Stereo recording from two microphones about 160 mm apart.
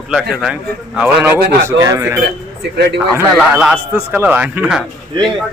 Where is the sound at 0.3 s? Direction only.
5° right (ahead or behind).